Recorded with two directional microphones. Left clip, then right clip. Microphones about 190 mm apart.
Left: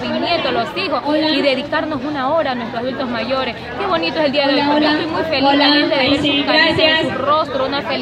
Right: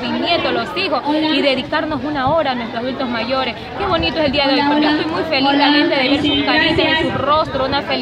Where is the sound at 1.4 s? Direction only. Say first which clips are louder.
Even; 5° right (ahead or behind).